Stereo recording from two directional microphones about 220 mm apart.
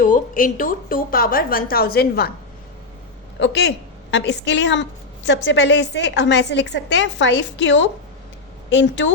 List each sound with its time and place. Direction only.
0.0 s a woman's voice: 35° left (ahead or behind)
3.3 s a woman's voice: 55° left (ahead or behind)